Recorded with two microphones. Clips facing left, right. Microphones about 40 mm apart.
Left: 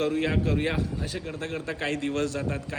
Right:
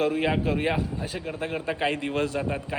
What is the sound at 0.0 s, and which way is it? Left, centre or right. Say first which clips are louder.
A man's voice: right 2 dB; centre.